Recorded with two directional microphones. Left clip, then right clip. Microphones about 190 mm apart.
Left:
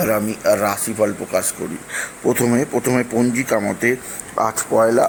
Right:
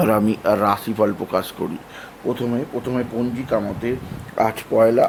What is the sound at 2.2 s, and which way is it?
Speech, 20° left (ahead or behind).